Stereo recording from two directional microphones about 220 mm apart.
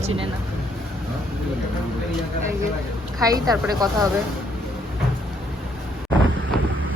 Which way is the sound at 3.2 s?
15° right (ahead or behind).